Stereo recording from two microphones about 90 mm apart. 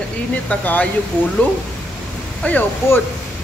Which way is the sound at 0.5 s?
15° left (ahead or behind).